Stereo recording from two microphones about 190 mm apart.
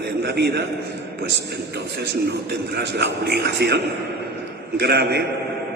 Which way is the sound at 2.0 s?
60° right (ahead or behind).